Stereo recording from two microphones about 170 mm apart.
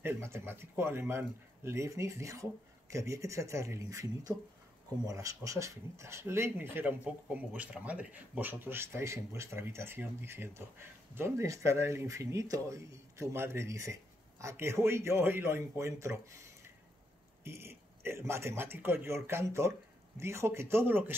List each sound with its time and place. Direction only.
0.0 s speech: 15° right (ahead or behind)
17.4 s speech: 15° right (ahead or behind)